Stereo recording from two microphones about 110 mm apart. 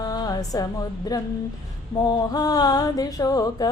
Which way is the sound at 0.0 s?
35° left (ahead or behind).